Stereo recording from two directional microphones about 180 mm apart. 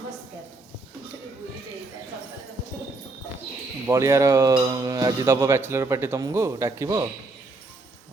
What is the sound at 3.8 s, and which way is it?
Speech, 15° right (ahead or behind).